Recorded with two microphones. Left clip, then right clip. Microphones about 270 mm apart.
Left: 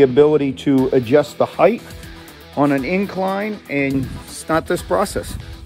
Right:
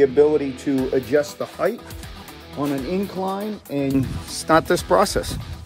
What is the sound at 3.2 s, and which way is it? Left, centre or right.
Speech, centre.